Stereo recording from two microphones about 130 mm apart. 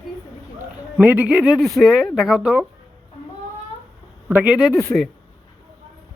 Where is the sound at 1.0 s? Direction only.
10° right (ahead or behind).